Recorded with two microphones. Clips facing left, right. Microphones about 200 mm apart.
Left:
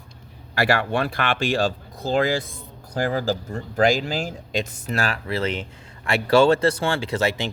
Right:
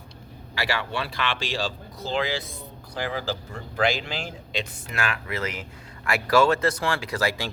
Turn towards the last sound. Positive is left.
turn(degrees=25)  # may be behind; listen again after turning